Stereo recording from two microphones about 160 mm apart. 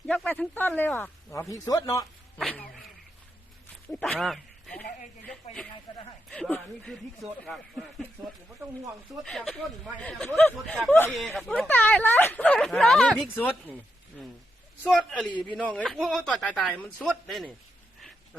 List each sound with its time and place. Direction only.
0.1 s a sound: 10° left (ahead or behind)
1.3 s speech: 20° left (ahead or behind)
2.4 s a sound: centre (ahead or behind)
4.0 s speech: centre (ahead or behind)
8.6 s speech: 15° right (ahead or behind)
9.2 s speech: centre (ahead or behind)